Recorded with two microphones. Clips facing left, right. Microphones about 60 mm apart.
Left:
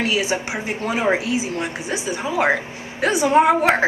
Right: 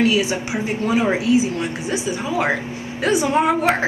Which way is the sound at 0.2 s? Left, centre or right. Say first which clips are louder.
Right 1 dB; left.